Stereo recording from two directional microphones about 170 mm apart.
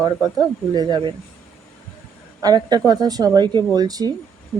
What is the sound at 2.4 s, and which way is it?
A woman's voice, 25° right (ahead or behind).